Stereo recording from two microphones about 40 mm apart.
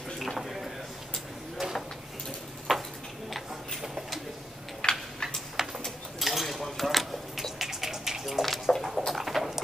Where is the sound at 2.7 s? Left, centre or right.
Centre.